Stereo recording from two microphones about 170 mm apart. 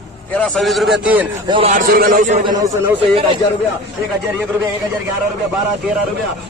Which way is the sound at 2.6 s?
15° right (ahead or behind).